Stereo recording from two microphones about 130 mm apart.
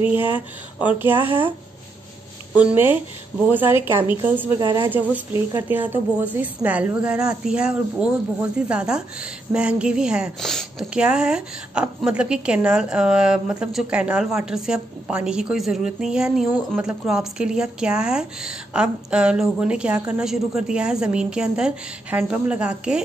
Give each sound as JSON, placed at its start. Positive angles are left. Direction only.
{"t": 0.9, "sound": "a woman's voice", "side_deg": -15}
{"t": 2.5, "sound": "a woman's voice", "side_deg": -15}
{"t": 4.6, "sound": "a woman's voice", "side_deg": -35}
{"t": 5.1, "sound": "a woman's voice", "side_deg": -20}